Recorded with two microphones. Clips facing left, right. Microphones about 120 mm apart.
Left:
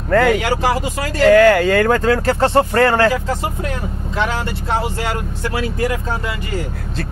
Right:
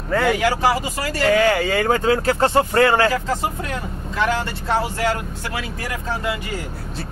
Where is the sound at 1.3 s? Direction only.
65° left (ahead or behind).